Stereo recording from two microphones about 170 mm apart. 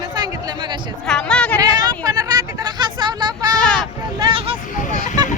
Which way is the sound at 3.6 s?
5° left (ahead or behind).